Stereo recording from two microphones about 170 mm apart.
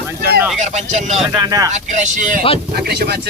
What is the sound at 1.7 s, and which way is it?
Speech, 45° right (ahead or behind).